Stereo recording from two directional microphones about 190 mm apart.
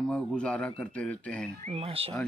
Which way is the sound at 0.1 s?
5° left (ahead or behind).